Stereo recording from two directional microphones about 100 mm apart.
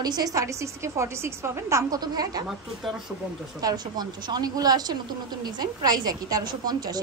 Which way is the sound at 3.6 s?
40° right (ahead or behind).